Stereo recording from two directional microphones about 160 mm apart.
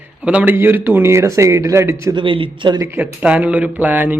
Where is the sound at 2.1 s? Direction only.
30° right (ahead or behind).